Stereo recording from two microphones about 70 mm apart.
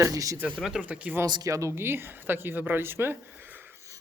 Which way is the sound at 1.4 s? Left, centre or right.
Right.